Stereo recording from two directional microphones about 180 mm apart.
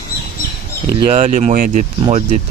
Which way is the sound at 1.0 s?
35° right (ahead or behind).